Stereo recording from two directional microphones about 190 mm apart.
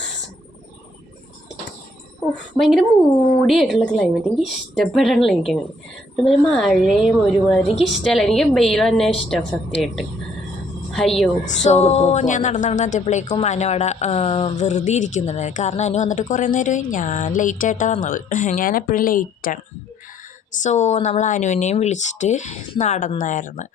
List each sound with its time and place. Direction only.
2.6 s a woman's voice: centre (ahead or behind)
11.4 s speech: 35° left (ahead or behind)
20.6 s speech: 40° left (ahead or behind)